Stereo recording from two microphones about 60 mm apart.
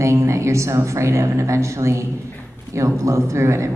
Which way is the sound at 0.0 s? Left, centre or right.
Right.